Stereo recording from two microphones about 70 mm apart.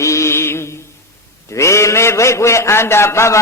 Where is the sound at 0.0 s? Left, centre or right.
Left.